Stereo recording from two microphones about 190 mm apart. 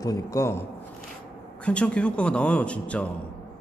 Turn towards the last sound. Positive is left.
turn(degrees=5)  # may be behind; listen again after turning